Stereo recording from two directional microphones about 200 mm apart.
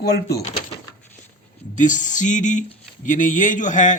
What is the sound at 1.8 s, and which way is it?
A man's voice, 40° left (ahead or behind).